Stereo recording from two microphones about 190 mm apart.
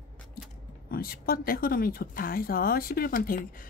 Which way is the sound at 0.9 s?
50° left (ahead or behind).